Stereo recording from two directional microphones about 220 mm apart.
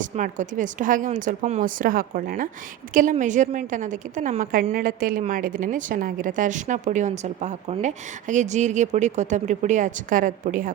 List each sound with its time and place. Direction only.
0.0 s a woman's voice: 35° right (ahead or behind)